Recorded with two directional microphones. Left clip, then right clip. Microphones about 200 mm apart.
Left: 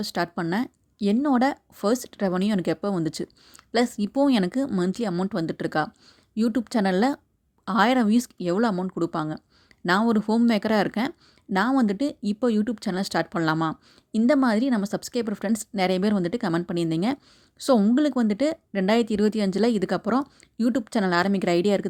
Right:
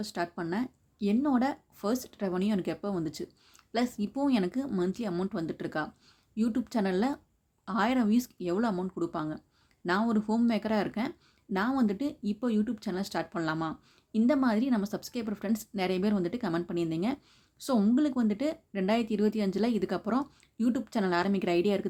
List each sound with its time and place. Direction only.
0.0 s speech: 45° left (ahead or behind)